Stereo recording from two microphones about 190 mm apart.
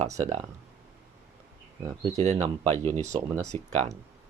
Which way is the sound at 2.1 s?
35° right (ahead or behind).